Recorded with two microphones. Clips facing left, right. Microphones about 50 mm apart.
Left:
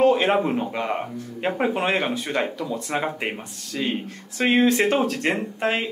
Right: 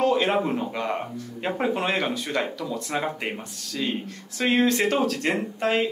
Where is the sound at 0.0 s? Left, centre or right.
Left.